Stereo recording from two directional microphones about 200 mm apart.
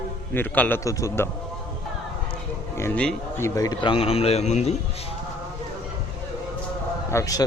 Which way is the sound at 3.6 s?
20° left (ahead or behind).